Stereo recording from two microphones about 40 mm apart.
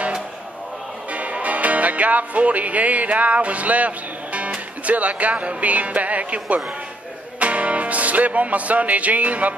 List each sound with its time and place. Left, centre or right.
1.1 s music: right
4.8 s speech: right